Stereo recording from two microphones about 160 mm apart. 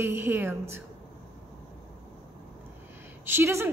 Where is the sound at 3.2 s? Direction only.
15° right (ahead or behind).